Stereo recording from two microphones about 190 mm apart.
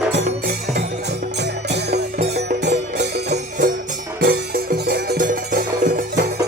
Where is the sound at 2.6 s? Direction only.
65° right (ahead or behind); by 6.0 s 45° right (ahead or behind).